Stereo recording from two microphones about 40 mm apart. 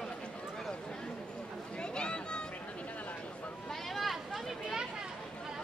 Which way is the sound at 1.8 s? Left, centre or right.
Left.